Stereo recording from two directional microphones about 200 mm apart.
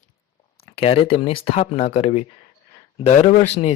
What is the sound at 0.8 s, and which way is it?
Speech, 30° left (ahead or behind).